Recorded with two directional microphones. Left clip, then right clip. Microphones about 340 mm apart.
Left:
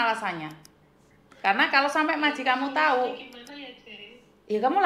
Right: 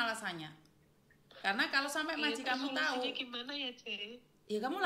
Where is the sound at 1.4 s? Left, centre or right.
Right.